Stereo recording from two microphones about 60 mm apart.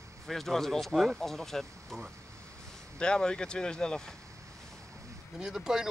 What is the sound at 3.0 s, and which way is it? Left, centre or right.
Speech, centre.